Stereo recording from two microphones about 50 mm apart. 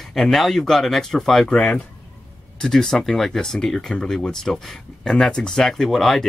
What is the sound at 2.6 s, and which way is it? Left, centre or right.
Speech, centre.